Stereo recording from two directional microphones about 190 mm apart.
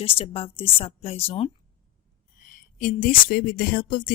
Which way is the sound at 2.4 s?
45° left (ahead or behind).